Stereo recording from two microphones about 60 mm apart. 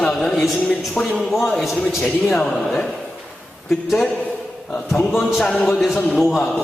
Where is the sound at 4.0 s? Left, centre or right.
Left.